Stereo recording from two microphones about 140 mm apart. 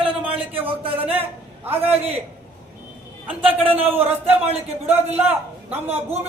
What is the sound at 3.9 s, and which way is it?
A man's voice, 15° right (ahead or behind).